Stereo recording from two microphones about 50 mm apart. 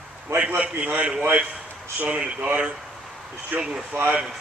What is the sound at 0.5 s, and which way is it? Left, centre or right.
Speech, right.